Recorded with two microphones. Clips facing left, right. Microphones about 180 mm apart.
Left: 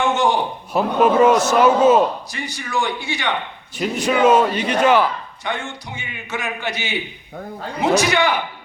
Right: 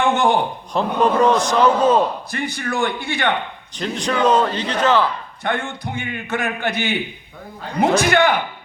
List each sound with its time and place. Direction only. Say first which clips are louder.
0.0 s speech: right 1 dB; 60° right (ahead or behind)
0.7 s a man's voice: left 2 dB; 5° left (ahead or behind)
2.3 s a man's voice: right 2 dB; 55° right (ahead or behind)
3.8 s a man's voice: left 3 dB; 5° left (ahead or behind)
5.4 s a man's voice: right 4 dB; 55° right (ahead or behind)